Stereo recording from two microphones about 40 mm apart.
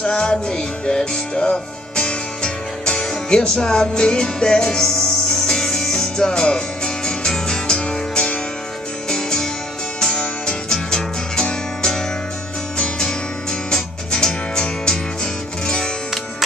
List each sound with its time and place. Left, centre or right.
0.0 s music: centre